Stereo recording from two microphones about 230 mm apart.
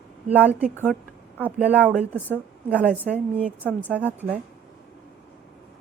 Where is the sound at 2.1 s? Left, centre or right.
Centre.